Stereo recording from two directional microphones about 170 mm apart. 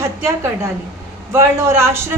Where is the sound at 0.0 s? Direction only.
15° right (ahead or behind).